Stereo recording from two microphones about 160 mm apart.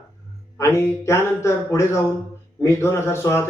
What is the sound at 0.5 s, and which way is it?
A man's voice, 15° left (ahead or behind).